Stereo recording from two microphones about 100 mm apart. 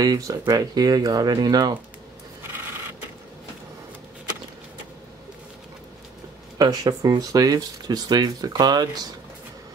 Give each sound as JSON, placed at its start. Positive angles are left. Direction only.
{"t": 0.0, "sound": "speech", "side_deg": -40}
{"t": 6.6, "sound": "speech", "side_deg": -40}